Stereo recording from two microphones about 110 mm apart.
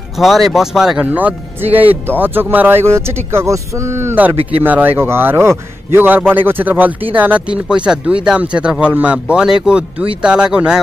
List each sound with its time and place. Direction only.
0.2 s speech: centre (ahead or behind)
1.1 s a man's voice: 15° right (ahead or behind)